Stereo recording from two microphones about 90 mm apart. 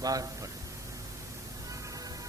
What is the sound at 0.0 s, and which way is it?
Speech, 40° right (ahead or behind).